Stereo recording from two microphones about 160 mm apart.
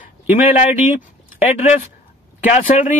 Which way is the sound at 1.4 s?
45° left (ahead or behind).